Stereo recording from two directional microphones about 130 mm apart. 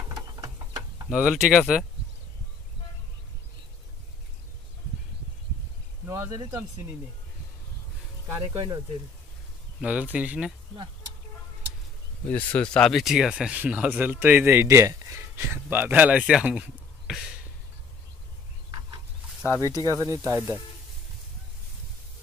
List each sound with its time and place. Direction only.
0.1 s a sound: 30° right (ahead or behind)
1.0 s speech: 5° right (ahead or behind)
6.0 s speech: 20° right (ahead or behind)
8.4 s speech: 30° right (ahead or behind)
9.8 s speech: 10° right (ahead or behind)
12.3 s speech: 10° left (ahead or behind); by 16.6 s 5° right (ahead or behind)
18.7 s a sound: 30° right (ahead or behind)
19.6 s speech: 25° right (ahead or behind)